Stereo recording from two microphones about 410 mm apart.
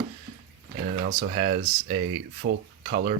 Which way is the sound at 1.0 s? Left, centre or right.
Centre.